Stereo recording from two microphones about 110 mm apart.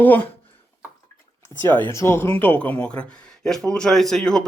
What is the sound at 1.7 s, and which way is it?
Speech, 15° left (ahead or behind).